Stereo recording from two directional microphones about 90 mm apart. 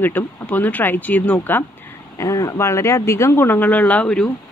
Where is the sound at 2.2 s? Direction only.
35° left (ahead or behind).